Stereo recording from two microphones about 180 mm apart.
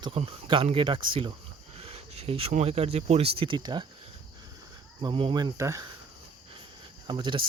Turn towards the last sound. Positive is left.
turn(degrees=-25)  # may be behind; listen again after turning